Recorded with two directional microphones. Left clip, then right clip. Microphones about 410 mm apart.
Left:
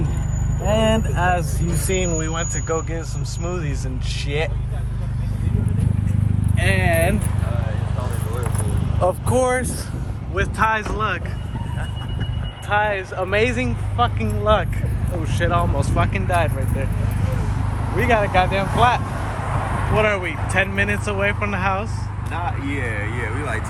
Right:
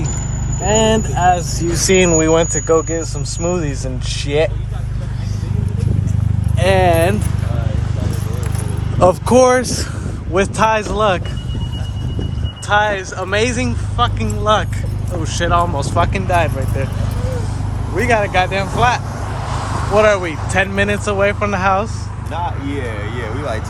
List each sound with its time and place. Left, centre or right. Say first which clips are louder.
0.7 s speech: right 5 dB; centre
6.7 s speech: right 7 dB; centre
9.0 s speech: right 9 dB; right; by 11.2 s centre
12.6 s speech: right 5 dB; centre
17.9 s speech: right 3 dB; centre